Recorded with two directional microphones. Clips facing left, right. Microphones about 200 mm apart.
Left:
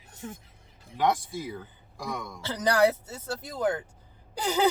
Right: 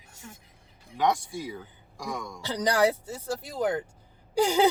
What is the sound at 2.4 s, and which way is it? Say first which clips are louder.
Speech: left 1 dB; 15° right (ahead or behind).